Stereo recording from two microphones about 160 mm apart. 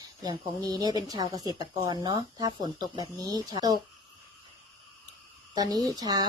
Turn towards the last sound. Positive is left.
turn(degrees=-25)  # may be behind; listen again after turning